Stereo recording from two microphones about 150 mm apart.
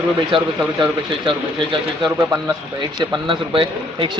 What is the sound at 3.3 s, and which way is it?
Speech, 35° right (ahead or behind).